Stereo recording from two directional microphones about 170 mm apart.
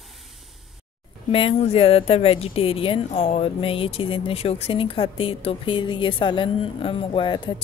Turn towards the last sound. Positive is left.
turn(degrees=30)  # may be behind; listen again after turning